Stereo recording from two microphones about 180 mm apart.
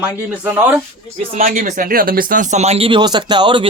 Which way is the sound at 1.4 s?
45° right (ahead or behind).